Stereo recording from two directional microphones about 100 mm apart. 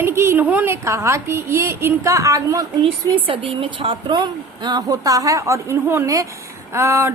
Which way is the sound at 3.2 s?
65° right (ahead or behind).